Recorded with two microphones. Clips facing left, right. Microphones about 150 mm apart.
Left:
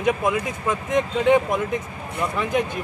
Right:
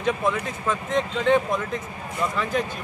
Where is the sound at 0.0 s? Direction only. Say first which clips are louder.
Left 3 dB; 15° left (ahead or behind).